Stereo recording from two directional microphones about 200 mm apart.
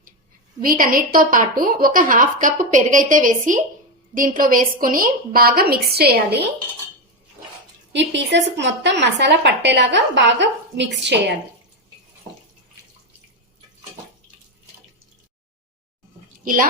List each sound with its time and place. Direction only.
0.6 s a woman's voice: 45° right (ahead or behind)
7.9 s a woman's voice: 60° right (ahead or behind)
16.4 s a woman's voice: 45° right (ahead or behind)